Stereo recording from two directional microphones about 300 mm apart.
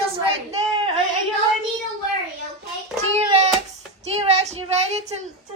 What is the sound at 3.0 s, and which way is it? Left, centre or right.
Hands, right.